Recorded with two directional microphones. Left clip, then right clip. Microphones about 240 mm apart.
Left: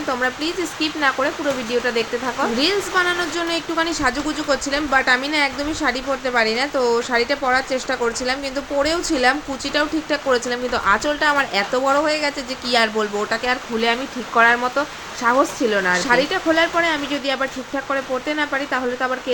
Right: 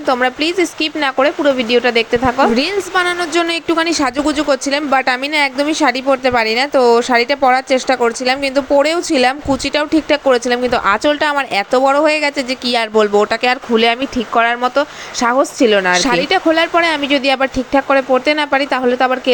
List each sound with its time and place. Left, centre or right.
0.1 s speech: right